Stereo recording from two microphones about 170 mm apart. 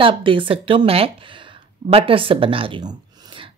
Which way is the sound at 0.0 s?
30° right (ahead or behind).